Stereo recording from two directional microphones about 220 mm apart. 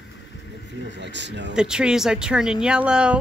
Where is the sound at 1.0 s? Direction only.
55° right (ahead or behind).